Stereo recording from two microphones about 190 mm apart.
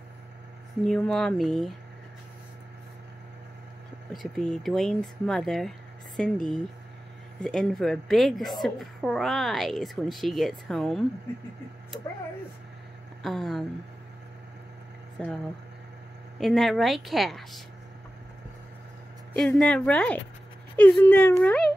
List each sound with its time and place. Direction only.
0.8 s a woman's voice: 5° left (ahead or behind)
4.1 s a woman's voice: centre (ahead or behind)
13.2 s a woman's voice: centre (ahead or behind)
15.2 s a woman's voice: 5° left (ahead or behind)
16.3 s a woman's voice: centre (ahead or behind)
19.3 s a woman's voice: 5° left (ahead or behind)